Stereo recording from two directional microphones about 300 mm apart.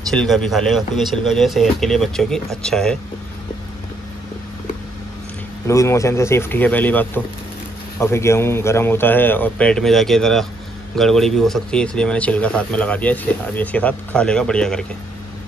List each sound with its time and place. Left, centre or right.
0.1 s speech: centre
5.7 s speech: centre